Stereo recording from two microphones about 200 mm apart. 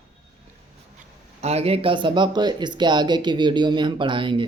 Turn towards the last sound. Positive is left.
turn(degrees=-25)  # may be behind; listen again after turning